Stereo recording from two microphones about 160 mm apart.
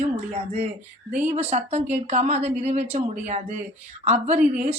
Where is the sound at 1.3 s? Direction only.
45° right (ahead or behind).